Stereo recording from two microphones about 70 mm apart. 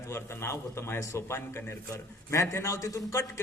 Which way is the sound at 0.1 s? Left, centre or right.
Left.